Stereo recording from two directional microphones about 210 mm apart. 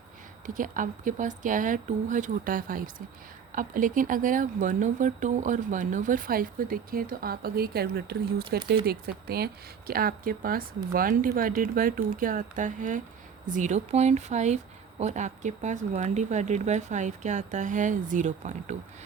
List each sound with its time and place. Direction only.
0.4 s speech: 40° right (ahead or behind)